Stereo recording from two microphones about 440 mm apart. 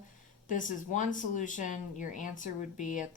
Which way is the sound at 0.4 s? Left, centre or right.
Centre.